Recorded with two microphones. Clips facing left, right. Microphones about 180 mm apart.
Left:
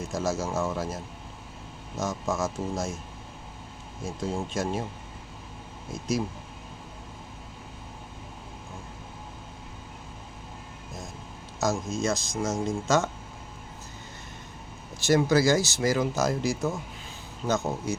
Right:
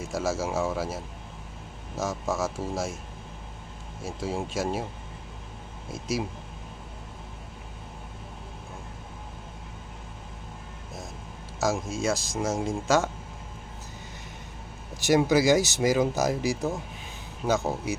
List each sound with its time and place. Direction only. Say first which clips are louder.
0.0 s speech: even; 5° right (ahead or behind)
2.0 s speech: even; 5° right (ahead or behind)
4.0 s speech: even; 5° right (ahead or behind)
5.9 s speech: left 1 dB; 5° right (ahead or behind)
11.6 s speech: even; 5° right (ahead or behind)
15.0 s speech: right 1 dB; 15° right (ahead or behind)